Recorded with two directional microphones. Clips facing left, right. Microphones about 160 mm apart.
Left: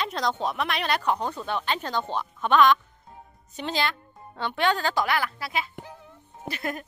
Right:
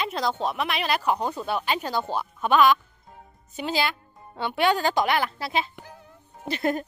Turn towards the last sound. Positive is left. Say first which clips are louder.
# right 6 dB
turn(degrees=-30)  # may be behind; listen again after turning